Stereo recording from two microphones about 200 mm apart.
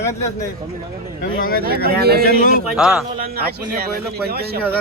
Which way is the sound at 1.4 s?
45° left (ahead or behind).